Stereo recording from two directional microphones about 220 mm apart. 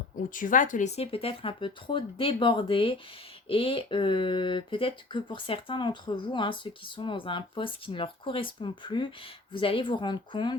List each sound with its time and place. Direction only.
0.3 s speech: 35° left (ahead or behind); by 10.6 s 20° left (ahead or behind)